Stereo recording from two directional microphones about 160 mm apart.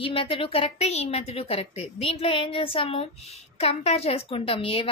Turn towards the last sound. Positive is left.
turn(degrees=35)  # may be behind; listen again after turning